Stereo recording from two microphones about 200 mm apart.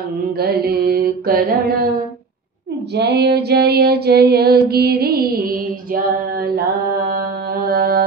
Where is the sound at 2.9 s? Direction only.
55° right (ahead or behind).